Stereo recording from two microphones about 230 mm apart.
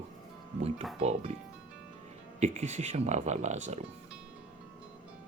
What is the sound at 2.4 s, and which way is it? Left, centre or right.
Speech, right.